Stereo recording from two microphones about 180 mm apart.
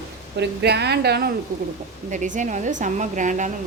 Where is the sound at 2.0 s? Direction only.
45° right (ahead or behind).